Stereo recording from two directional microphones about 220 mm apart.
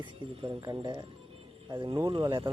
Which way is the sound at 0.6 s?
15° right (ahead or behind).